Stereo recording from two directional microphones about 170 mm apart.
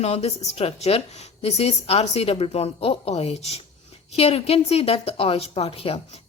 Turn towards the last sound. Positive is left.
turn(degrees=35)  # may be behind; listen again after turning